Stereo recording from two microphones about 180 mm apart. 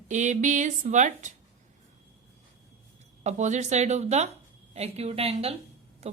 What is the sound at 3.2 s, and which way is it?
A woman's voice, 40° right (ahead or behind).